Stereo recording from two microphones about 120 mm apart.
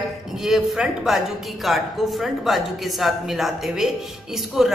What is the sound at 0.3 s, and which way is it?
A woman's voice, 5° right (ahead or behind).